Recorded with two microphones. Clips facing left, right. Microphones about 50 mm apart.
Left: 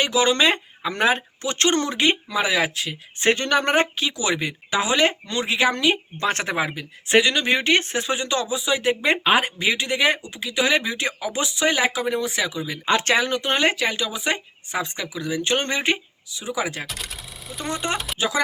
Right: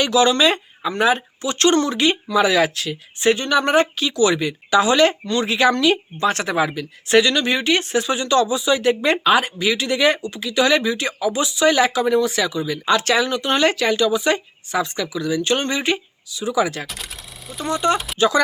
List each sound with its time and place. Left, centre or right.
0.0 s speech: left
0.3 s speech: left
3.2 s speech: left
6.1 s speech: left; by 7.4 s centre
7.4 s speech: left; by 9.1 s centre
9.2 s speech: left
11.7 s speech: centre; by 13.6 s left
13.6 s speech: centre
16.8 s sewing machine: centre
17.7 s speech: centre
17.9 s speech: centre
18.2 s speech: centre